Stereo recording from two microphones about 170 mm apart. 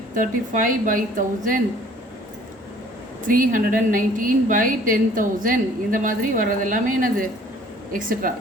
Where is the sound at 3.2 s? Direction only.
55° right (ahead or behind).